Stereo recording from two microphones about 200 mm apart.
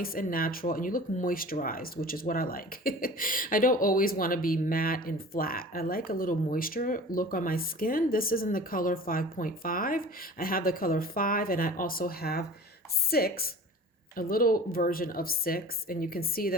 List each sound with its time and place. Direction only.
0.0 s speech: 45° left (ahead or behind)